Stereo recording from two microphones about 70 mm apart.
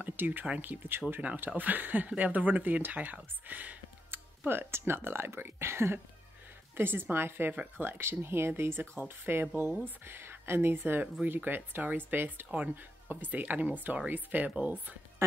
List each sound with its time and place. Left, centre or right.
0.0 s speech: right